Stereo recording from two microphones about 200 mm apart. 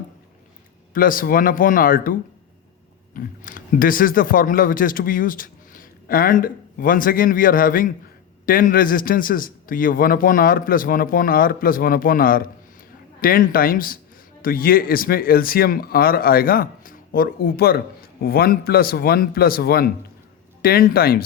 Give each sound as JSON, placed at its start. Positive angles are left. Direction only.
{"t": 0.9, "sound": "speech", "side_deg": 45}
{"t": 3.2, "sound": "speech", "side_deg": 45}